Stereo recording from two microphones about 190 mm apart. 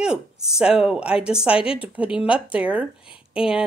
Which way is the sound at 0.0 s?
5° right (ahead or behind).